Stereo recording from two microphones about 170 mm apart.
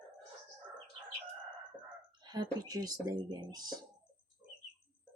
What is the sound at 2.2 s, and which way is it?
Speech, 25° right (ahead or behind).